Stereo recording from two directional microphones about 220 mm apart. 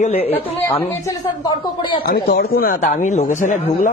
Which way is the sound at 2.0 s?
45° left (ahead or behind).